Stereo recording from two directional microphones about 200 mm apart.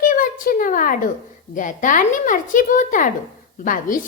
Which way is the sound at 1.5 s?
40° left (ahead or behind).